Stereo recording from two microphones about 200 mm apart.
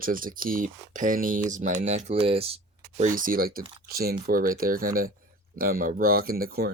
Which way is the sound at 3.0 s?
45° right (ahead or behind).